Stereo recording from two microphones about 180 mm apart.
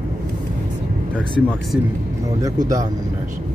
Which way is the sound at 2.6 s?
45° right (ahead or behind).